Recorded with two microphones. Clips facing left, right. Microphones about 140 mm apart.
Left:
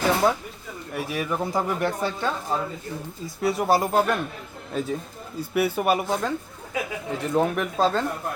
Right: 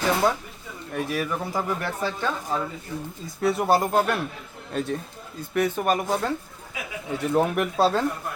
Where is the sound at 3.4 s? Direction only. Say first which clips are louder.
Even; centre (ahead or behind).